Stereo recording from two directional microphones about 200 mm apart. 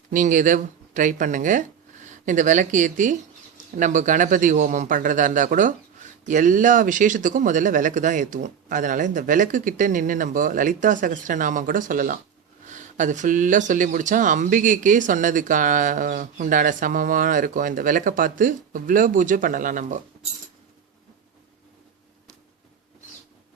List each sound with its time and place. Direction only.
0.1 s a man's voice: 40° right (ahead or behind)